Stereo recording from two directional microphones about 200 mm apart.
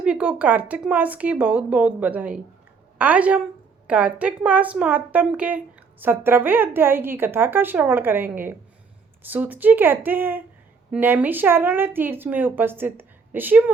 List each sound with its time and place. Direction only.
0.0 s a woman's voice: 5° right (ahead or behind)